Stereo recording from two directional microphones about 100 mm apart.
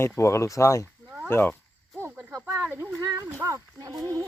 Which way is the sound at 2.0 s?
15° right (ahead or behind).